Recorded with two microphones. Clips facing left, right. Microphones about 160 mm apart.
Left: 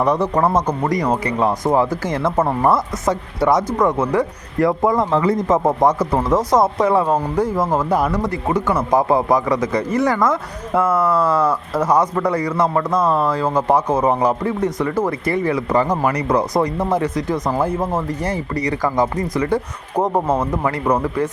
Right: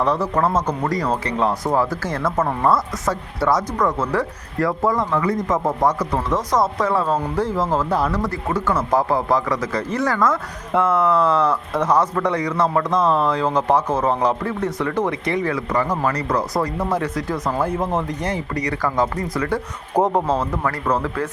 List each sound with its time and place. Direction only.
0.0 s speech: 15° left (ahead or behind)
10.7 s speech: 5° left (ahead or behind)
15.9 s speech: 20° left (ahead or behind)